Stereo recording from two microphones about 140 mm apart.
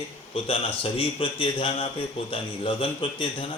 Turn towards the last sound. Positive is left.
turn(degrees=40)  # may be behind; listen again after turning